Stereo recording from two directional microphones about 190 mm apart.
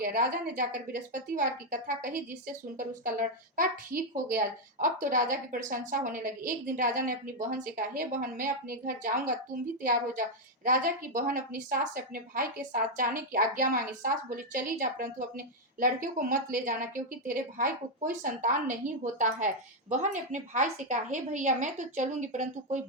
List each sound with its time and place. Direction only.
0.0 s a woman's voice: 45° right (ahead or behind)